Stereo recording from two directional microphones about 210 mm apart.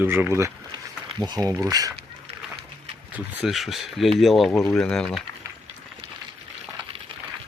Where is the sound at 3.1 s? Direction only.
5° right (ahead or behind).